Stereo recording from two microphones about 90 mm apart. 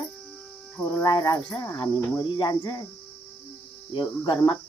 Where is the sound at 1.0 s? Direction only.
45° left (ahead or behind).